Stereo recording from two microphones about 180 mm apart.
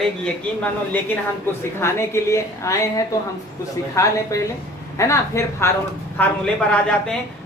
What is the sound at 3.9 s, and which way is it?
Speech, 15° left (ahead or behind).